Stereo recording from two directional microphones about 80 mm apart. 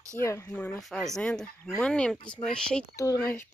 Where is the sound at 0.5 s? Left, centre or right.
Centre.